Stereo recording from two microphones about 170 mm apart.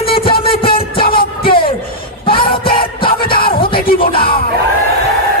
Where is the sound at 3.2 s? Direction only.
30° left (ahead or behind).